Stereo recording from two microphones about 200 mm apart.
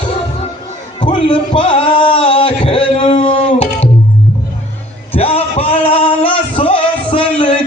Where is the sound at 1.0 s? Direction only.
25° left (ahead or behind).